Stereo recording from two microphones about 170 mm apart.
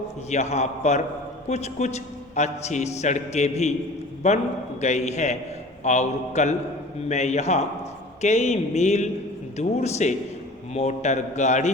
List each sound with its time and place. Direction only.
0.3 s a man's voice: 40° left (ahead or behind)